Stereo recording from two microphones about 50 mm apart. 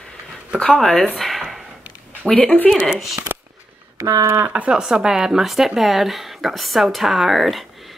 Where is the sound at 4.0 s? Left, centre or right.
Right.